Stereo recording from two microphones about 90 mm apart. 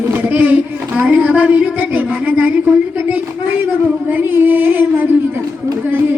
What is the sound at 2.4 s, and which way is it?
Music, 20° right (ahead or behind).